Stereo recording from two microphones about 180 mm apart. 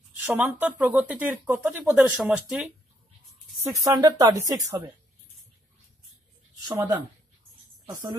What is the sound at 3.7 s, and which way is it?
Speech, 20° right (ahead or behind).